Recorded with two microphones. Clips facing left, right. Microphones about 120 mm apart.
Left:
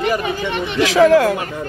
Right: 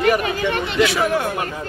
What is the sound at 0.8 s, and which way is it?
Speech, 90° left.